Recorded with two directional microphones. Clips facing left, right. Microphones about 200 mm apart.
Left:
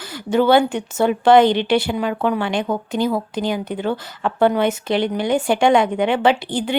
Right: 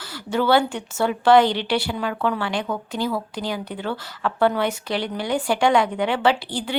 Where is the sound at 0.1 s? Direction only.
20° left (ahead or behind).